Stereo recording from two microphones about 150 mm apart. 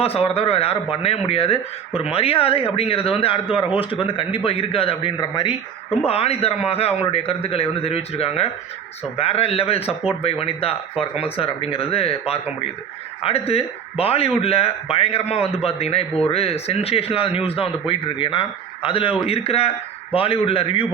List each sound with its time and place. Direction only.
0.0 s a man's voice: 40° left (ahead or behind)